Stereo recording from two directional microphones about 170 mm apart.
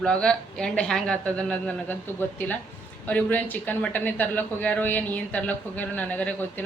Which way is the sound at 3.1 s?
10° left (ahead or behind).